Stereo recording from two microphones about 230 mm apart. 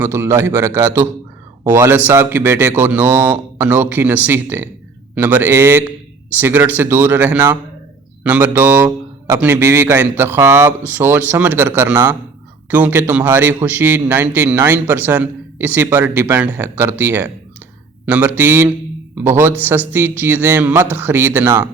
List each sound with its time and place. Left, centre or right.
0.0 s a man's voice: centre